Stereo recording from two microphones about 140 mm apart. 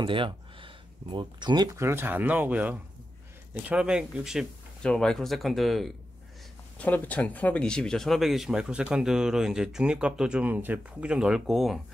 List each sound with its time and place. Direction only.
0.0 s speech: 35° right (ahead or behind); by 5.9 s centre (ahead or behind)
6.8 s speech: 10° left (ahead or behind)